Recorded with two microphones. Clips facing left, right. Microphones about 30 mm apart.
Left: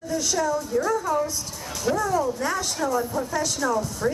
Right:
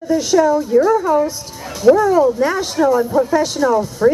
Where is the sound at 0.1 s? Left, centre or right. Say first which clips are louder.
Right 11 dB; right.